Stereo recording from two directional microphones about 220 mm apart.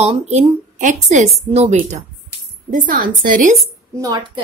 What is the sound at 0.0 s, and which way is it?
A woman's voice, 30° right (ahead or behind).